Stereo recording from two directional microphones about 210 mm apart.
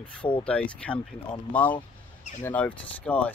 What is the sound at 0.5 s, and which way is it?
Speech, 5° left (ahead or behind).